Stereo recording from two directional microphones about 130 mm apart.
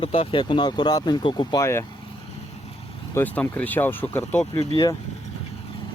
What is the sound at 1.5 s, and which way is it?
Speech, 20° left (ahead or behind).